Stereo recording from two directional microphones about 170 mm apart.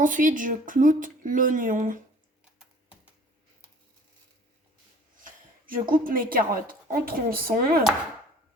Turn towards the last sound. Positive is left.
turn(degrees=-55)  # may be behind; listen again after turning